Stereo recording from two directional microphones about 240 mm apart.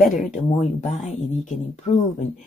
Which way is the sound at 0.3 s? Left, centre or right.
Left.